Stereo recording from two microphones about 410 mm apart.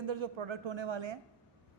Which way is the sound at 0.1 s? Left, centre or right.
Right.